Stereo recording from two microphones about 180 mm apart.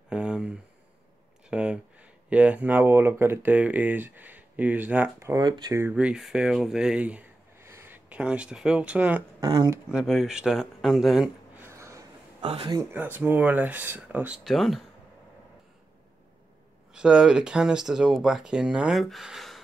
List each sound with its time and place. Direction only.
0.1 s a sound: 5° right (ahead or behind)
1.5 s speech: 5° right (ahead or behind)
9.4 s speech: 20° right (ahead or behind)
9.9 s speech: 5° right (ahead or behind)
11.6 s a sound: 15° right (ahead or behind)
12.4 s speech: 30° right (ahead or behind)
12.9 s speech: 10° right (ahead or behind)
16.9 s speech: 5° right (ahead or behind)